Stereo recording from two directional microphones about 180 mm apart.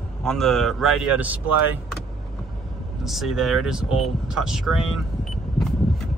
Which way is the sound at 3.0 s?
Centre (ahead or behind).